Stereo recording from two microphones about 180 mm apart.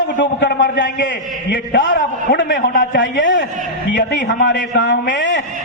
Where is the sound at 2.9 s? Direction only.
90° left.